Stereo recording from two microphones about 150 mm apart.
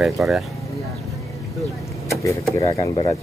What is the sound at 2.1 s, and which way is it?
Speech, 25° left (ahead or behind).